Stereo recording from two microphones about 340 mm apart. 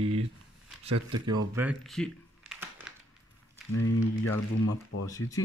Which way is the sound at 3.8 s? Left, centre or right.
Left.